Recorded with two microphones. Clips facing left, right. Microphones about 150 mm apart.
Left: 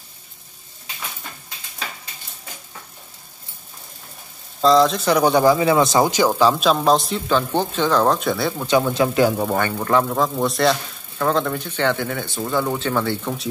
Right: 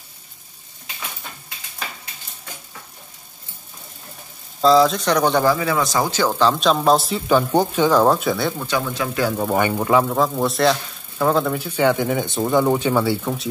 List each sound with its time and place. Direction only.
4.6 s speech: centre (ahead or behind)
8.5 s speech: 20° left (ahead or behind)
9.6 s a man's voice: 15° right (ahead or behind)